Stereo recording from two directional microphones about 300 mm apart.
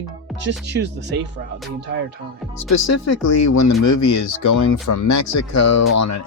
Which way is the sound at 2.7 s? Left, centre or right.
Left.